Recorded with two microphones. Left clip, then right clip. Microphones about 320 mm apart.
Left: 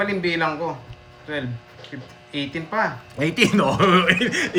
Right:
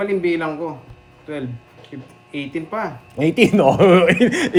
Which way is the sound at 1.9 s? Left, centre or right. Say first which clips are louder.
Even; left.